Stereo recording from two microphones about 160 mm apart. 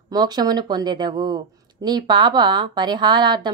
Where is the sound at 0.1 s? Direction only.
25° right (ahead or behind).